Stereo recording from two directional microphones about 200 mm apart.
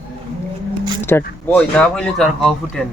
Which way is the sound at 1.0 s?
10° left (ahead or behind).